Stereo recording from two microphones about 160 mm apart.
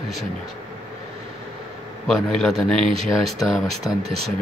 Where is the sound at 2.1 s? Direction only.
Centre (ahead or behind).